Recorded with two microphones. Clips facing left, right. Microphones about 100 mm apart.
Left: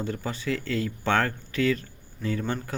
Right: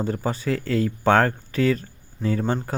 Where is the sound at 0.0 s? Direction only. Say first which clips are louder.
Right 5 dB; 40° right (ahead or behind).